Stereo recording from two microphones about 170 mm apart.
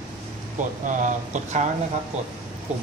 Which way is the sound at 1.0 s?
45° right (ahead or behind).